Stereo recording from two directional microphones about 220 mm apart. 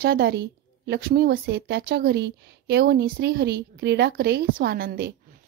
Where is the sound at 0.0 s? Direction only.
45° right (ahead or behind).